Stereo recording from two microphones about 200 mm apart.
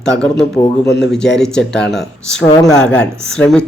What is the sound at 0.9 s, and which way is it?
Speech, 60° left (ahead or behind).